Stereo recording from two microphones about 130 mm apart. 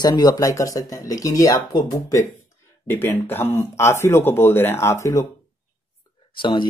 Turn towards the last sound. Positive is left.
turn(degrees=40)  # may be behind; listen again after turning